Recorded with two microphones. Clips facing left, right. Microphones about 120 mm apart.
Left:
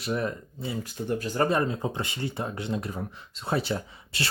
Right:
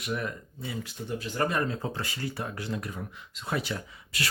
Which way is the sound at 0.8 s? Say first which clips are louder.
Left 5 dB; 45° left (ahead or behind).